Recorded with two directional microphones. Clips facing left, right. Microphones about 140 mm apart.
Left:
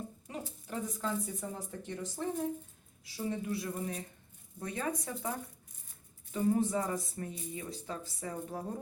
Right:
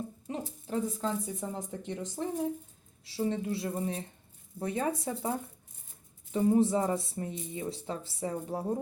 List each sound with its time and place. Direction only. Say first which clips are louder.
0.3 s a woman's voice: right 7 dB; 30° right (ahead or behind)